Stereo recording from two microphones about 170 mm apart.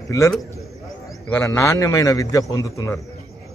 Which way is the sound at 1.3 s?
15° left (ahead or behind).